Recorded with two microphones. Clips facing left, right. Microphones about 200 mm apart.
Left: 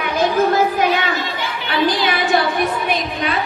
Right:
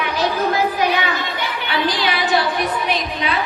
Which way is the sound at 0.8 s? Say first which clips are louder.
Left 2 dB; 50° left (ahead or behind).